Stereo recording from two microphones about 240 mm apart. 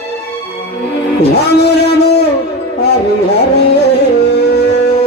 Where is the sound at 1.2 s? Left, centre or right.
Left.